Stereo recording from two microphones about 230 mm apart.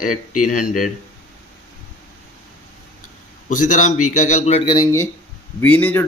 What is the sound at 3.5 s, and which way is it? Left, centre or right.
A man's voice, left.